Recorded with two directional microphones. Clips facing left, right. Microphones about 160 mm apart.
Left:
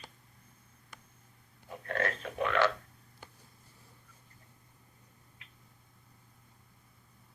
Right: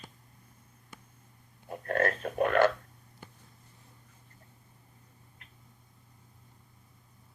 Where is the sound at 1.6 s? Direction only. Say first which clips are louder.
Right 5 dB; 50° right (ahead or behind).